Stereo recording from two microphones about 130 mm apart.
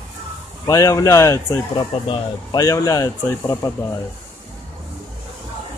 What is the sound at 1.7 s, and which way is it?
Speech, 35° left (ahead or behind).